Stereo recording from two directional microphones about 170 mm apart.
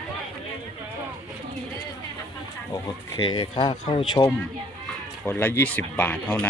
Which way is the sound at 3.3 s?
25° left (ahead or behind).